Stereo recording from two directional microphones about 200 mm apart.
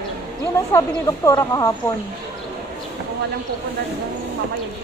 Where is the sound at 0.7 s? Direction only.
15° left (ahead or behind).